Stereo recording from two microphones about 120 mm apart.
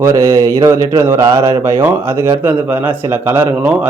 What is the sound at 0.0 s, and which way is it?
A man's voice, 25° right (ahead or behind).